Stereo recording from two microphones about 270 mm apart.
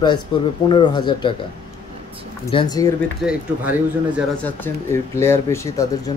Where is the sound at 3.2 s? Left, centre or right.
Centre.